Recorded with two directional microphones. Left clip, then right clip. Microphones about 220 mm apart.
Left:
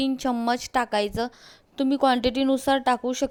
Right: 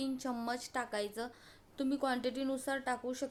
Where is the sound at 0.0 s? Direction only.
35° left (ahead or behind).